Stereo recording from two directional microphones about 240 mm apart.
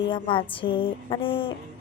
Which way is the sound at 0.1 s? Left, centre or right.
Left.